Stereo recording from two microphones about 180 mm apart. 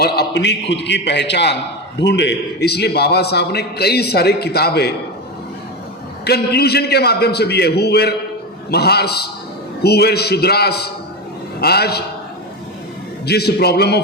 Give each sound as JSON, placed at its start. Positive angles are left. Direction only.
{"t": 0.0, "sound": "a man's voice", "side_deg": 70}
{"t": 6.2, "sound": "a man's voice", "side_deg": 65}
{"t": 13.2, "sound": "a man's voice", "side_deg": 65}